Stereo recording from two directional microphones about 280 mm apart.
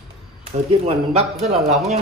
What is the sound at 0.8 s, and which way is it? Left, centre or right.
Speech, right.